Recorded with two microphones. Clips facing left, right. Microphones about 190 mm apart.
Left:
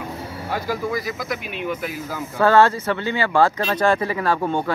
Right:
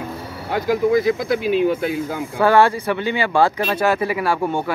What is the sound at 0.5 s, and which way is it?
Speech, 20° right (ahead or behind).